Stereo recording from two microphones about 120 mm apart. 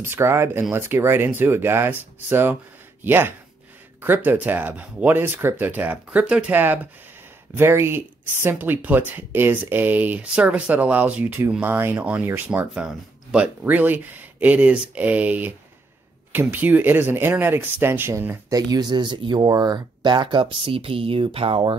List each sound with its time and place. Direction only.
0.0 s speech: 20° right (ahead or behind)
18.7 s speech: 35° right (ahead or behind)